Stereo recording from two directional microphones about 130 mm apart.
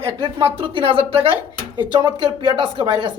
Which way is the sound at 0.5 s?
40° right (ahead or behind).